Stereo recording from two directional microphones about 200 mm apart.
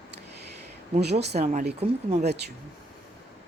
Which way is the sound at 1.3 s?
35° right (ahead or behind).